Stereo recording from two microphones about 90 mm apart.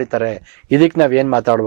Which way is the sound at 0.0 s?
15° right (ahead or behind).